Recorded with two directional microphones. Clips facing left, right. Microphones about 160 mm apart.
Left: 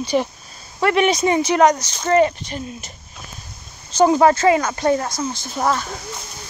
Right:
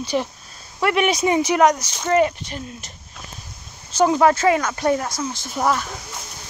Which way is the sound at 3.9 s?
Centre (ahead or behind).